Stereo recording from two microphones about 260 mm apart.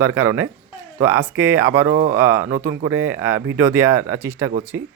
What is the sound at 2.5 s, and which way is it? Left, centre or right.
Speech, right.